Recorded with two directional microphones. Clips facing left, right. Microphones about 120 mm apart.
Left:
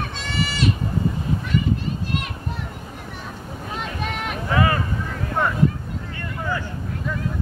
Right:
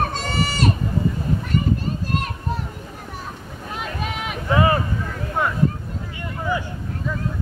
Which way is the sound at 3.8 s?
Centre (ahead or behind).